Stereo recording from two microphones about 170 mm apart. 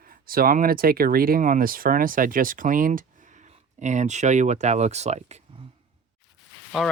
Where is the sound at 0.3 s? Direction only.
60° right (ahead or behind); by 5.4 s 40° right (ahead or behind).